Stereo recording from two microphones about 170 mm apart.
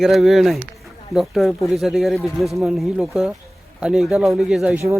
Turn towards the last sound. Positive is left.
turn(degrees=-5)  # may be behind; listen again after turning